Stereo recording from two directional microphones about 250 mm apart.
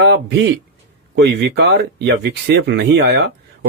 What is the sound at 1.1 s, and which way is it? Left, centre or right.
Speech, right.